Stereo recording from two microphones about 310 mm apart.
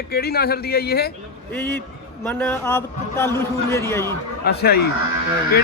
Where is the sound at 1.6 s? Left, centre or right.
Centre.